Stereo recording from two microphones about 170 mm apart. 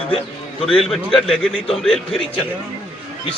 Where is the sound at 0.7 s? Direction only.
Centre (ahead or behind).